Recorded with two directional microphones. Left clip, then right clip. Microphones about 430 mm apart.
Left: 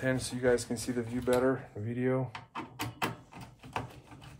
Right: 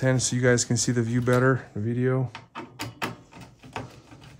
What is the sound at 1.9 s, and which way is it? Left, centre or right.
Speech, right.